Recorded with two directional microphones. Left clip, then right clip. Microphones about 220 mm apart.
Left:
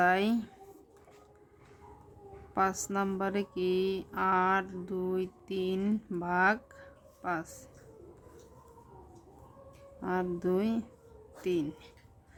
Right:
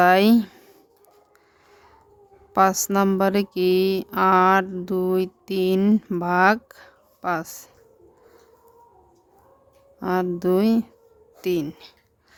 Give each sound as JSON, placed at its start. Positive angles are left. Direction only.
{"t": 0.0, "sound": "mantra", "side_deg": -50}
{"t": 2.6, "sound": "mantra", "side_deg": -50}
{"t": 10.0, "sound": "mantra", "side_deg": -50}